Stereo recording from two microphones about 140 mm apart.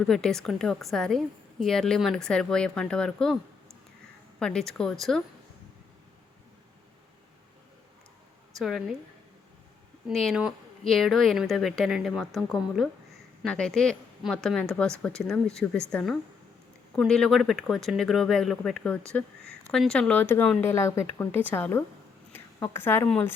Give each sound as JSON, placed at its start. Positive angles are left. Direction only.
{"t": 0.0, "sound": "a woman's voice", "side_deg": 5}
{"t": 4.4, "sound": "a woman's voice", "side_deg": 5}
{"t": 8.5, "sound": "a woman's voice", "side_deg": 0}
{"t": 10.1, "sound": "a woman's voice", "side_deg": 0}
{"t": 22.3, "sound": "a sound", "side_deg": 15}
{"t": 23.0, "sound": "a woman's voice", "side_deg": 10}